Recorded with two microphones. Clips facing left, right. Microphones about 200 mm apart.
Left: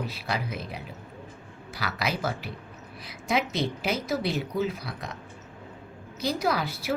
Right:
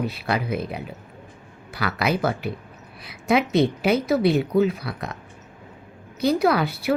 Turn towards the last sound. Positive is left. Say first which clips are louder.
# right 6 dB
turn(degrees=-60)  # may be behind; listen again after turning